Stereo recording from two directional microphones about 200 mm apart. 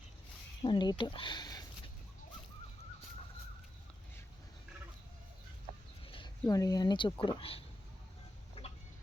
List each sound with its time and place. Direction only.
0.6 s speech: 25° left (ahead or behind)
6.1 s a sound: 25° left (ahead or behind)
6.5 s speech: 20° left (ahead or behind)
8.6 s chicken: 30° left (ahead or behind)